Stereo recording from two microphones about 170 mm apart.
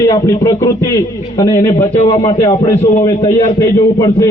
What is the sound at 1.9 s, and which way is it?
Speech, 40° left (ahead or behind).